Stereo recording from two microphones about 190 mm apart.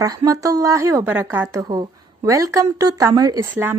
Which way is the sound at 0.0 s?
20° right (ahead or behind).